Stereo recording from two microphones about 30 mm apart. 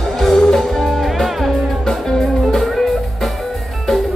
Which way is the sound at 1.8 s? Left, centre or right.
Centre.